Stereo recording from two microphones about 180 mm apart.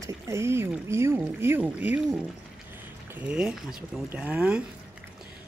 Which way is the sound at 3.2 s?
5° right (ahead or behind).